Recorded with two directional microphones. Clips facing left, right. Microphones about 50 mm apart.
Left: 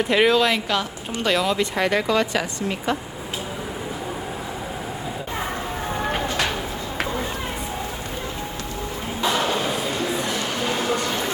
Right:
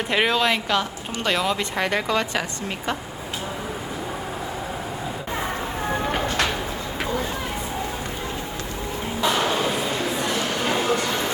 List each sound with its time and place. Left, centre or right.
0.0 s a woman's voice: centre